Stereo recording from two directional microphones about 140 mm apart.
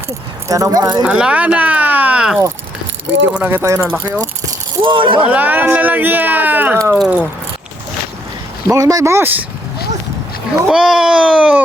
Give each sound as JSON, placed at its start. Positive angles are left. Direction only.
{"t": 0.4, "sound": "speech", "side_deg": -25}
{"t": 1.0, "sound": "speech", "side_deg": -5}
{"t": 4.8, "sound": "speech", "side_deg": -35}
{"t": 5.2, "sound": "speech", "side_deg": -10}
{"t": 8.7, "sound": "speech", "side_deg": -25}
{"t": 10.7, "sound": "speech", "side_deg": -5}